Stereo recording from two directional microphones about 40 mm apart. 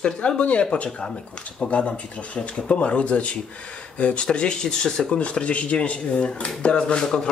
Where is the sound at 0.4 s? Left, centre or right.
Left.